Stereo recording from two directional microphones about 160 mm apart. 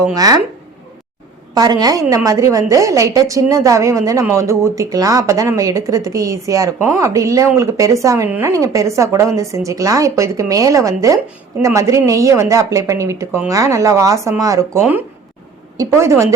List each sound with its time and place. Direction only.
0.0 s a woman's voice: 20° right (ahead or behind)
1.5 s a woman's voice: 25° right (ahead or behind)